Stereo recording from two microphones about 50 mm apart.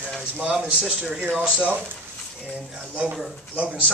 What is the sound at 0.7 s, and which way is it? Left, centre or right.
A man's voice, centre.